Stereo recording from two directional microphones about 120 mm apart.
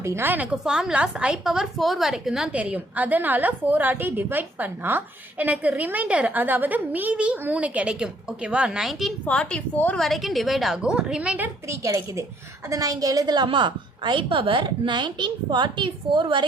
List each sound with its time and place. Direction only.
0.0 s a woman's voice: 20° right (ahead or behind)
0.5 s a woman's voice: 5° right (ahead or behind); by 10.0 s 10° left (ahead or behind)
10.0 s a woman's voice: centre (ahead or behind); by 16.5 s 40° right (ahead or behind)